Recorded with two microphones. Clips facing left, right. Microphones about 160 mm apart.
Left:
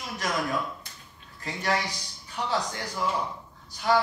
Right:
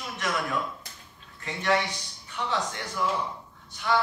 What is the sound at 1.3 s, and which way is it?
A woman's voice, 35° left (ahead or behind).